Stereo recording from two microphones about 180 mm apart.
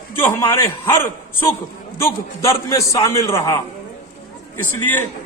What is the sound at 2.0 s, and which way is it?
A man's voice, 15° left (ahead or behind).